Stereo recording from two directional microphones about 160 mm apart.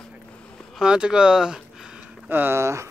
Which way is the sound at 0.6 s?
5° right (ahead or behind).